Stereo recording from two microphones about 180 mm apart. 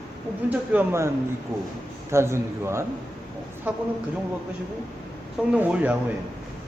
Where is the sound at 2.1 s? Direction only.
15° right (ahead or behind).